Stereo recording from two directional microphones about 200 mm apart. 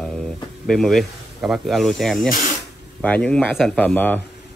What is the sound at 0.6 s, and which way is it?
Speech, centre (ahead or behind).